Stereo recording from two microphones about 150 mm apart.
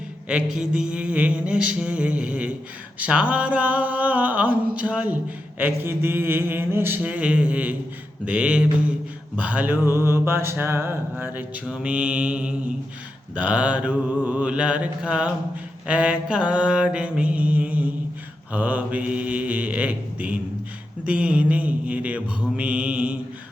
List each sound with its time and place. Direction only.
0.3 s mantra: 5° right (ahead or behind)